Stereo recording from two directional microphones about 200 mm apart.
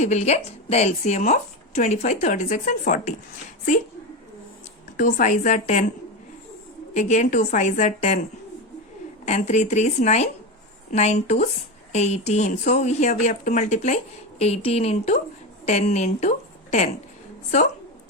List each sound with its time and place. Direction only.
0.0 s speech: 35° left (ahead or behind)
4.9 s speech: 40° left (ahead or behind)
6.9 s speech: 35° left (ahead or behind)
9.2 s speech: 35° left (ahead or behind)